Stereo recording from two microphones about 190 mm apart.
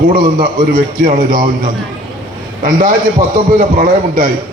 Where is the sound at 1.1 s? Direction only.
45° right (ahead or behind).